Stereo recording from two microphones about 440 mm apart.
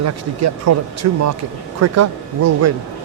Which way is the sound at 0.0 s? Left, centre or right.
Right.